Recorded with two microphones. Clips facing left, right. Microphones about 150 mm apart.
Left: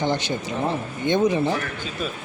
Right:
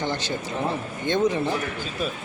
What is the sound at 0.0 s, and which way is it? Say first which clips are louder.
Speech: left 4 dB; 15° left (ahead or behind).